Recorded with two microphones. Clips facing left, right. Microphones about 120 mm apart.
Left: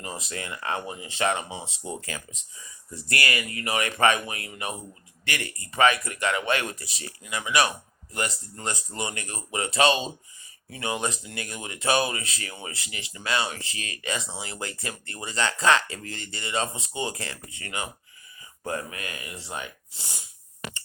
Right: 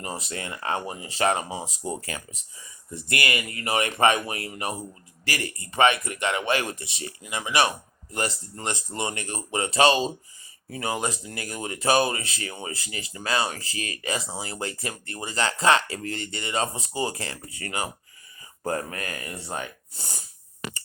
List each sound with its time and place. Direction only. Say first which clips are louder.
0.3 s speech: right 1 dB; 30° right (ahead or behind)